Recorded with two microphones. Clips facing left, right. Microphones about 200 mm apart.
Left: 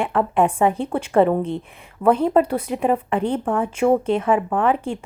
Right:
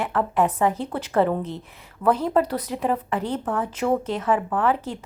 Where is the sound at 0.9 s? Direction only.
25° left (ahead or behind).